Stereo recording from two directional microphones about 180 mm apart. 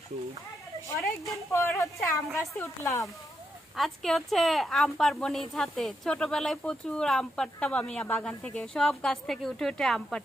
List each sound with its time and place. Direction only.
1.5 s a woman's voice: 15° left (ahead or behind)
3.7 s a woman's voice: centre (ahead or behind)